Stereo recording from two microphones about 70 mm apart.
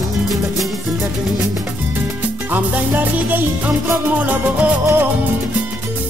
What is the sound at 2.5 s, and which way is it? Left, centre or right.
Music, right.